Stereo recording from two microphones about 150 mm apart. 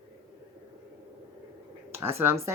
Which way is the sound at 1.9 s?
15° right (ahead or behind).